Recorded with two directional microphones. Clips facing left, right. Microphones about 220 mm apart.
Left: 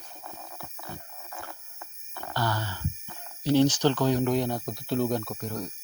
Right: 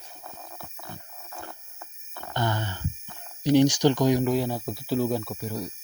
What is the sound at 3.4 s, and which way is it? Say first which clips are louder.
Speech: right 2 dB; 15° right (ahead or behind).